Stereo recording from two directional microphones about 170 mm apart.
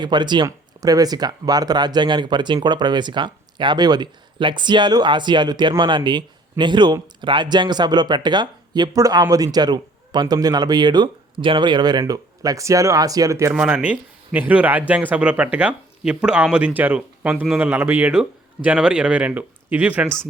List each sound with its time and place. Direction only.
0.0 s speech: 25° right (ahead or behind); by 20.1 s 10° right (ahead or behind)